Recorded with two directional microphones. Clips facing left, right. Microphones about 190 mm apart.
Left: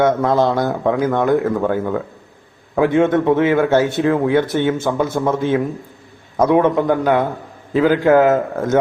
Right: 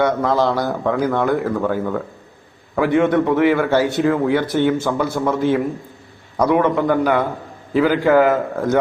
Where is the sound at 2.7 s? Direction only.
20° left (ahead or behind).